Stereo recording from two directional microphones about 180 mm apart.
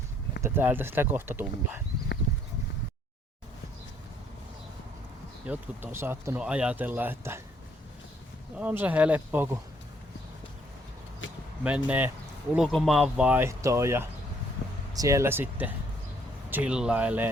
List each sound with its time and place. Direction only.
0.4 s speech: 10° right (ahead or behind)
5.5 s speech: 15° right (ahead or behind)
8.5 s speech: 10° right (ahead or behind)
11.2 s vehicle: 90° left
11.6 s speech: 10° right (ahead or behind)